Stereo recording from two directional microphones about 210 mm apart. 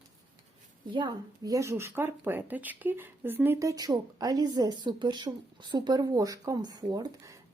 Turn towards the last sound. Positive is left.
turn(degrees=-15)  # may be behind; listen again after turning